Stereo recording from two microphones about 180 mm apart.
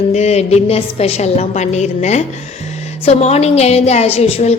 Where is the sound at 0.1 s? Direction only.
35° left (ahead or behind).